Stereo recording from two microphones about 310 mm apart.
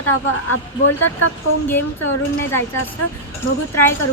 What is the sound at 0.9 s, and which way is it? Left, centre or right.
Speech, left.